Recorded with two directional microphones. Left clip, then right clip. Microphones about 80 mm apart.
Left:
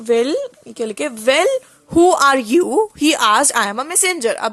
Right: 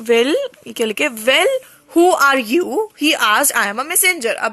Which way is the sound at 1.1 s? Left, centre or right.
Left.